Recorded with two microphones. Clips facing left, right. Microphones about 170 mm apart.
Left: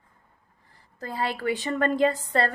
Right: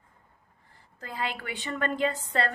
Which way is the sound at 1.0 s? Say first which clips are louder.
Left 6 dB; 40° left (ahead or behind).